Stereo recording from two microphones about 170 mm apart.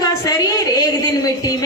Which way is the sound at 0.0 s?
20° left (ahead or behind).